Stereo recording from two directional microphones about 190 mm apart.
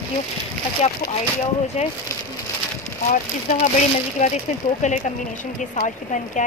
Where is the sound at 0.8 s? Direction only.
35° left (ahead or behind).